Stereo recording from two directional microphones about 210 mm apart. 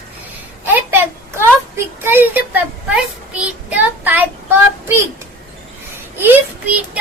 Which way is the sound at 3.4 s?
5° right (ahead or behind).